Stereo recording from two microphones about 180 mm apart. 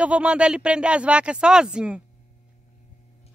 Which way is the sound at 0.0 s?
5° right (ahead or behind).